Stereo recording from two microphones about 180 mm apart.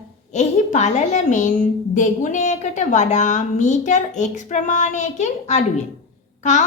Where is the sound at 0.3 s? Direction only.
40° left (ahead or behind).